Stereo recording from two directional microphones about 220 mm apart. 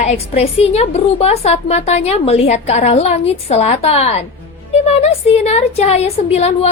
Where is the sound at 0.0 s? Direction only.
30° left (ahead or behind).